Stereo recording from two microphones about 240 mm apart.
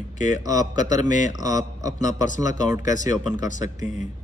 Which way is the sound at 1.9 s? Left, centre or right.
Left.